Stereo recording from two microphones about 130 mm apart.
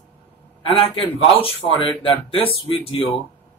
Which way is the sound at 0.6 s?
45° left (ahead or behind).